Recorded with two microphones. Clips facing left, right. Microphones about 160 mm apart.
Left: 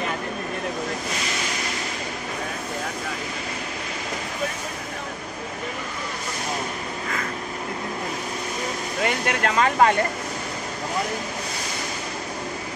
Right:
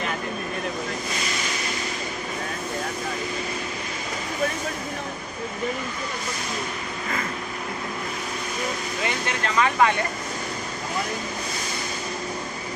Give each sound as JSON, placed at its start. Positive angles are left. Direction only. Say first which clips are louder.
{"t": 9.0, "sound": "speech", "louder": "left 5 dB", "side_deg": 55}